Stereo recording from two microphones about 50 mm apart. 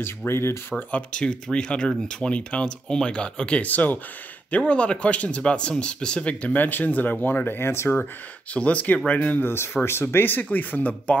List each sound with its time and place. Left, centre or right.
0.0 s speech: left
1.1 s speech: centre
3.6 s speech: left
4.5 s speech: left
8.5 s speech: left